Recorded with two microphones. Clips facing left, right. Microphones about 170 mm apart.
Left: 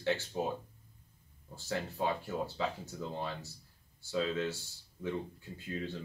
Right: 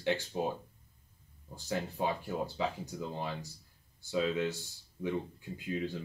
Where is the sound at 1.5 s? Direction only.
15° right (ahead or behind).